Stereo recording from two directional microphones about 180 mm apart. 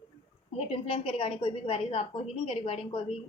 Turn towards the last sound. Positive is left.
turn(degrees=30)  # may be behind; listen again after turning